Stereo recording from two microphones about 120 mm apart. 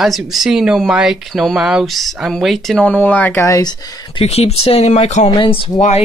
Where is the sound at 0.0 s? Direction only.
Centre (ahead or behind).